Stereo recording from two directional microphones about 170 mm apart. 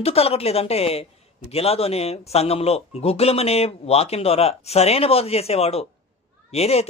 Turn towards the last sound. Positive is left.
turn(degrees=40)  # may be behind; listen again after turning